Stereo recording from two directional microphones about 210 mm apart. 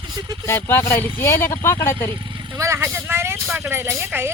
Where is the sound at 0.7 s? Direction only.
10° left (ahead or behind).